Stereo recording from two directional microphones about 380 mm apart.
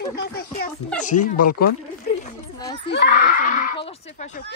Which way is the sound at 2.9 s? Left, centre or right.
Left.